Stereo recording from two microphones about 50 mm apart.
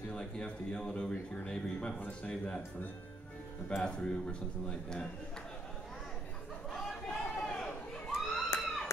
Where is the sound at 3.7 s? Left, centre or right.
Left.